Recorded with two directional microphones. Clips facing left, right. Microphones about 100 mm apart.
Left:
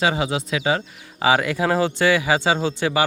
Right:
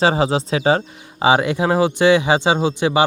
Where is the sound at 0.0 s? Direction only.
35° right (ahead or behind).